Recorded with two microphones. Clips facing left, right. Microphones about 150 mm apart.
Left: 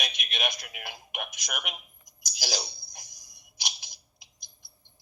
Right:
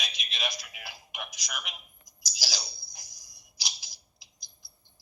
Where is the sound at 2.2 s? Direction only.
55° left (ahead or behind).